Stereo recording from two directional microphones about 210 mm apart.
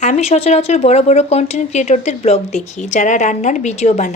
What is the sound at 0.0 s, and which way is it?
Speech, 30° left (ahead or behind).